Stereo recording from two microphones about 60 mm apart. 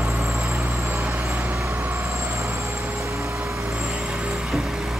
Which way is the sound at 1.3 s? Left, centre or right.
Right.